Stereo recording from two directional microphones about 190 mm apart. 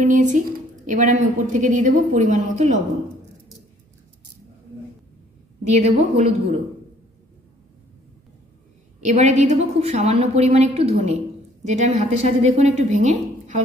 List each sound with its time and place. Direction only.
0.0 s a woman's voice: 40° right (ahead or behind)
5.7 s a woman's voice: 35° right (ahead or behind)
9.0 s a woman's voice: 35° right (ahead or behind)